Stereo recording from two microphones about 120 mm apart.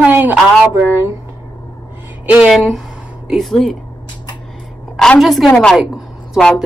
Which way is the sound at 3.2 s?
Centre (ahead or behind).